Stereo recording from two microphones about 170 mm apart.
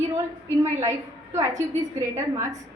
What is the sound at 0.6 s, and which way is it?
A woman's voice, 15° right (ahead or behind).